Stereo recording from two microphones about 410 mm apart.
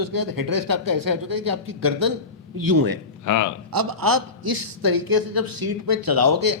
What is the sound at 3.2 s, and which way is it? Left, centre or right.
Speech, left.